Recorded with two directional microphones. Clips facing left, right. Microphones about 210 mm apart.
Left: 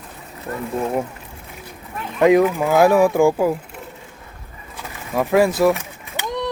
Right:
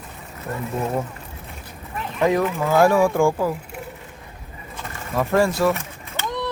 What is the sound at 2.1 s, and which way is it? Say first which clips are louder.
Speech: left 6 dB; 15° left (ahead or behind).